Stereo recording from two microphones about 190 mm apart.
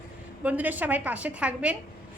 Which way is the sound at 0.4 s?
10° right (ahead or behind).